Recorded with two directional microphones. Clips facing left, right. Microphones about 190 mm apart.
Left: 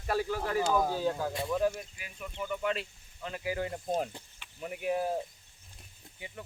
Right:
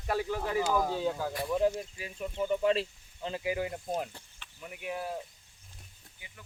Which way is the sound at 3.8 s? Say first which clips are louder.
Left 2 dB; 25° left (ahead or behind).